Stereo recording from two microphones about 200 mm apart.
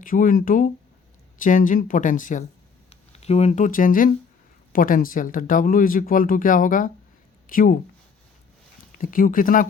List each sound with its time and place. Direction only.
0.0 s speech: 40° left (ahead or behind)
9.0 s speech: 45° left (ahead or behind)